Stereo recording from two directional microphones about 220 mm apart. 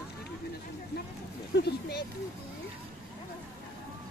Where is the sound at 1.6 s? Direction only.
45° left (ahead or behind).